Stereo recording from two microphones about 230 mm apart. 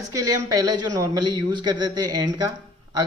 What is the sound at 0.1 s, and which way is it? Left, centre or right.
A man's voice, centre.